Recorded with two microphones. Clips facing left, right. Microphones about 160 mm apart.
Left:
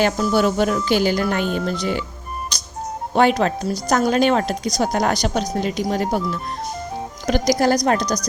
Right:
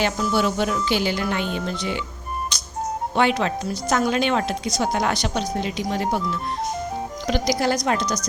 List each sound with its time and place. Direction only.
0.0 s speech: 45° left (ahead or behind)
2.5 s music: 40° left (ahead or behind)
3.2 s speech: 40° left (ahead or behind)
7.3 s speech: 45° left (ahead or behind)